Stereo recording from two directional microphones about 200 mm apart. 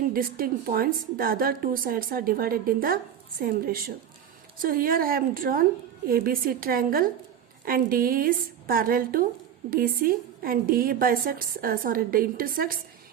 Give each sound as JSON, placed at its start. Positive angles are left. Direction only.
{"t": 0.1, "sound": "a woman's voice", "side_deg": -45}